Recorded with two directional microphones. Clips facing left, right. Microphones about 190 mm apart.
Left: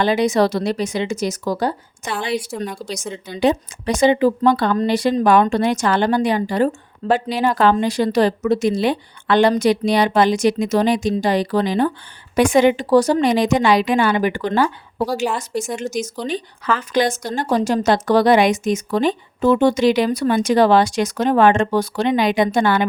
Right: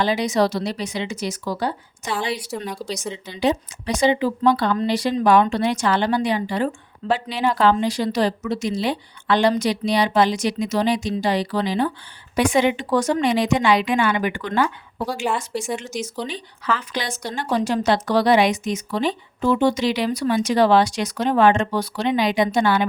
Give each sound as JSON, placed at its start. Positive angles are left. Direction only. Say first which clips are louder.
{"t": 0.0, "sound": "a woman's voice", "louder": "left 3 dB", "side_deg": 55}